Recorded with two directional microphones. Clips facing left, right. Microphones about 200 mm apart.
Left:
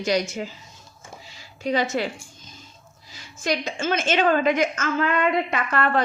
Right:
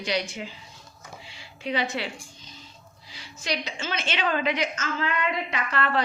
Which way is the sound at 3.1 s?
45° left (ahead or behind).